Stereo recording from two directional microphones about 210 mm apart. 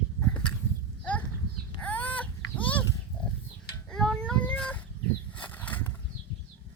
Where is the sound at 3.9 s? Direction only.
Centre (ahead or behind).